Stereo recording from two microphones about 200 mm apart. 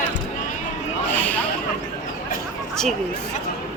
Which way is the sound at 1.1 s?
10° left (ahead or behind).